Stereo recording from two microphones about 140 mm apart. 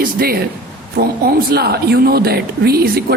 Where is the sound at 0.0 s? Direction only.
90° right.